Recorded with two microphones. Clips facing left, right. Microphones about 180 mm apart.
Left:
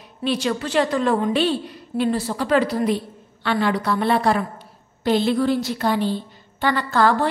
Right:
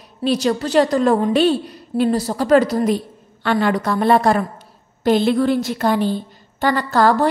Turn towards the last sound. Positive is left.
turn(degrees=-40)  # may be behind; listen again after turning